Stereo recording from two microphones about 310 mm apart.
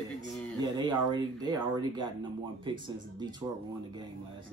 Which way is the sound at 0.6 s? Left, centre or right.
Centre.